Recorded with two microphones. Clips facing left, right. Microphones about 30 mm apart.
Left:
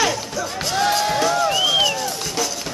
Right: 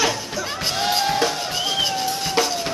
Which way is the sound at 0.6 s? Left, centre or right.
Centre.